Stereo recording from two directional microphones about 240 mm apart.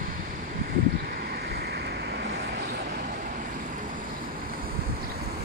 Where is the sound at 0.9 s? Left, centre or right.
Right.